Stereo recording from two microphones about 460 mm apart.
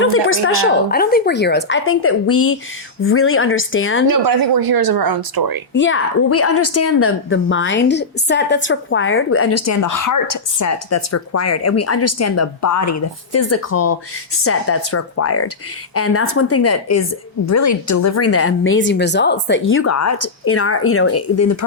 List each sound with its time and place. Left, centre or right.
0.0 s a woman's voice: left
4.1 s speech: right
5.7 s a woman's voice: left